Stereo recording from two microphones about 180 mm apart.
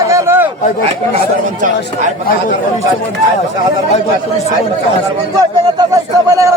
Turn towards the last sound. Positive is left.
turn(degrees=-20)  # may be behind; listen again after turning